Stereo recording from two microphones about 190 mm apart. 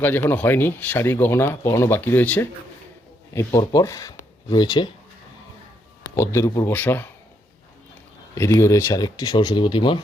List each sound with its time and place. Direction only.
0.0 s speech: 10° left (ahead or behind)
6.1 s speech: 15° left (ahead or behind)
8.4 s speech: 15° left (ahead or behind)